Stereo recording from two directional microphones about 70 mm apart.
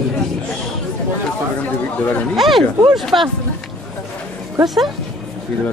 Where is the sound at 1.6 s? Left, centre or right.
Left.